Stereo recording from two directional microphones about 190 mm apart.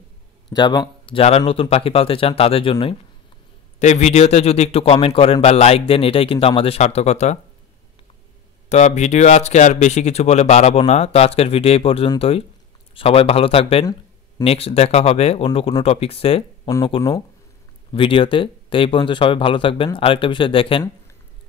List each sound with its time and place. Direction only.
0.5 s speech: 20° left (ahead or behind)
8.6 s speech: 35° left (ahead or behind)
16.6 s speech: 20° left (ahead or behind)